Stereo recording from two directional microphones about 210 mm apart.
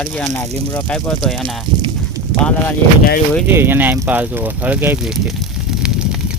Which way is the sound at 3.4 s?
10° right (ahead or behind).